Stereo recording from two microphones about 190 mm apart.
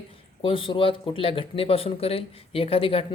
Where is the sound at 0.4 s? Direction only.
25° left (ahead or behind).